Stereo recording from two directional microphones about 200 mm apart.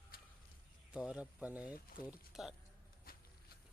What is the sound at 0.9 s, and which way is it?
Speech, 5° right (ahead or behind).